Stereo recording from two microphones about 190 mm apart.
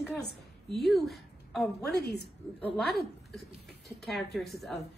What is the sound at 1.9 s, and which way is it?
Speech, 60° left (ahead or behind).